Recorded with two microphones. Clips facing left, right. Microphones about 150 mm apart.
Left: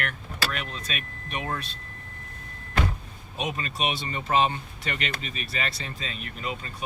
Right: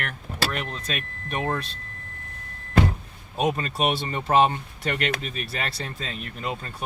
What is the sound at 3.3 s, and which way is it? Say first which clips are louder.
Speech: right 6 dB; 45° right (ahead or behind).